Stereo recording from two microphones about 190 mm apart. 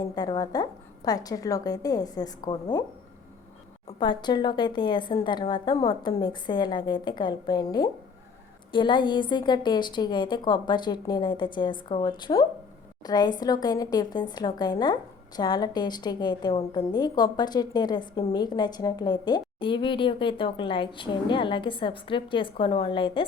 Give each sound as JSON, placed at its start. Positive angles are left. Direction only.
{"t": 0.2, "sound": "a woman's voice", "side_deg": 20}
{"t": 3.8, "sound": "a woman's voice", "side_deg": 25}